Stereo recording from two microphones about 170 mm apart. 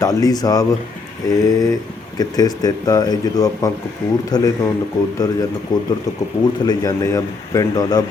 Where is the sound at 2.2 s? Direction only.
20° left (ahead or behind).